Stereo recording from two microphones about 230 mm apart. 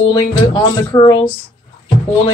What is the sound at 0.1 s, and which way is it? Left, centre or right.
Speech, centre.